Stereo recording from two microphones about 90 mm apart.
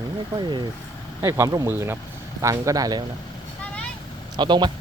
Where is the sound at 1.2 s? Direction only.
35° right (ahead or behind).